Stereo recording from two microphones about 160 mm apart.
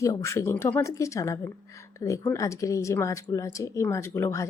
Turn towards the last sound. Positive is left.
turn(degrees=15)  # may be behind; listen again after turning